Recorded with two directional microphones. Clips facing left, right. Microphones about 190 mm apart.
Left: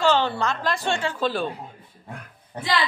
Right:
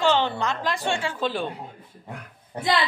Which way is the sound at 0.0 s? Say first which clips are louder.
Left 1 dB; 15° right (ahead or behind).